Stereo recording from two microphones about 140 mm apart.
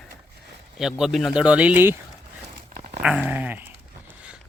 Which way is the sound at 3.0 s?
10° right (ahead or behind).